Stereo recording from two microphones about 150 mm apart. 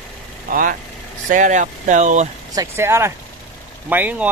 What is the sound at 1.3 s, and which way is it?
Speech, 55° right (ahead or behind).